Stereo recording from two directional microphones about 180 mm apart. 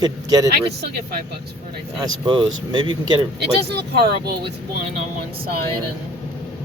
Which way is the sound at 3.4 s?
65° right (ahead or behind).